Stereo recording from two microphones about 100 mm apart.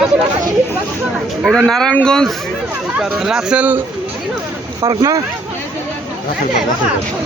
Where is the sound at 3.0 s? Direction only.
5° right (ahead or behind).